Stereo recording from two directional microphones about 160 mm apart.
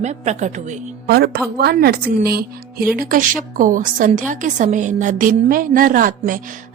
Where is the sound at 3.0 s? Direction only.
60° right (ahead or behind).